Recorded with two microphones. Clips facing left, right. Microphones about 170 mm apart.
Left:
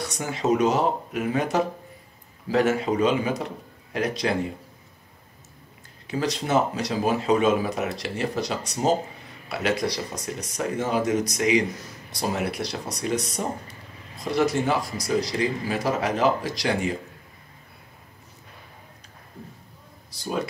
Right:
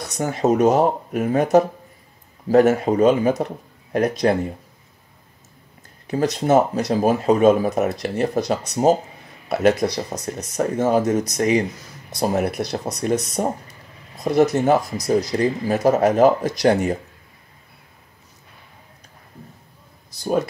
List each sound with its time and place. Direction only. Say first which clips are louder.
0.2 s speech: right 5 dB; 50° right (ahead or behind)
6.0 s speech: right 7 dB; 50° right (ahead or behind)